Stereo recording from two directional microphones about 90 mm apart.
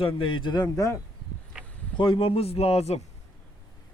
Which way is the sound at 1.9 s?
65° left (ahead or behind).